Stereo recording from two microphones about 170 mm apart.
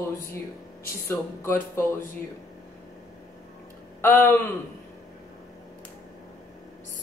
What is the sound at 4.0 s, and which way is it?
Speech, 10° left (ahead or behind).